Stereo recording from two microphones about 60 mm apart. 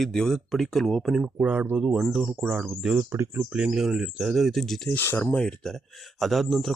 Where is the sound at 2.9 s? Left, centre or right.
Right.